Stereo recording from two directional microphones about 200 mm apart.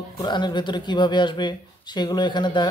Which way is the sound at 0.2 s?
20° left (ahead or behind).